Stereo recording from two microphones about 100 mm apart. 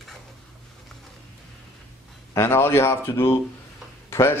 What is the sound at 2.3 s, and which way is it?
Speech, 25° left (ahead or behind).